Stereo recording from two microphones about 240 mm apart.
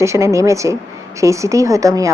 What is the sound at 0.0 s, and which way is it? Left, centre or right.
Speech, centre.